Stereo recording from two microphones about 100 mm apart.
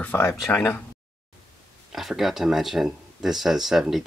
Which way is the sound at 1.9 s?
5° right (ahead or behind).